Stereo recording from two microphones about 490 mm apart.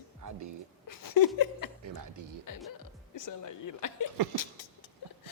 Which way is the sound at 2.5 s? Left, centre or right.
Left.